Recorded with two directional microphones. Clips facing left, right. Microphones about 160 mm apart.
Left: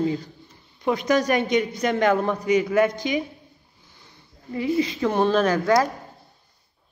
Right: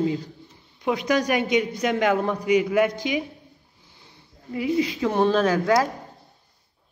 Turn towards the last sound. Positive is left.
turn(degrees=-5)  # may be behind; listen again after turning